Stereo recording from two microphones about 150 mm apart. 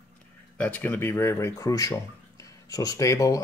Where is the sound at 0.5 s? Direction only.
10° left (ahead or behind).